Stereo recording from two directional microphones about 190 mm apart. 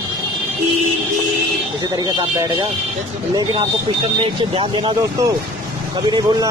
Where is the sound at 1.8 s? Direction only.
20° right (ahead or behind).